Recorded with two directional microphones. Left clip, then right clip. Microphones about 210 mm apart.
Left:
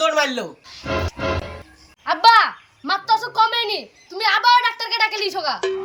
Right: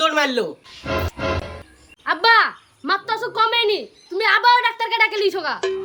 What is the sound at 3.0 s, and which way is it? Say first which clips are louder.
Speech: left 6 dB; 20° right (ahead or behind).